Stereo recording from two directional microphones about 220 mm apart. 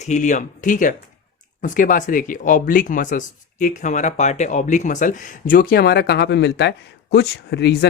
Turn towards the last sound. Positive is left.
turn(degrees=50)  # may be behind; listen again after turning